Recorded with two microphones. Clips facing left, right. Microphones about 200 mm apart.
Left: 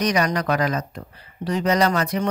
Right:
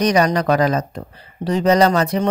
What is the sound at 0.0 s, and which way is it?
Speech, 30° right (ahead or behind).